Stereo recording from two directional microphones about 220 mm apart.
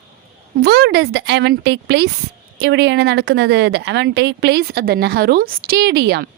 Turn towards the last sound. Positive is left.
turn(degrees=-45)  # may be behind; listen again after turning